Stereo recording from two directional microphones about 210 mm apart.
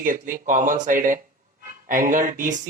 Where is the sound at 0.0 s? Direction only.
40° right (ahead or behind).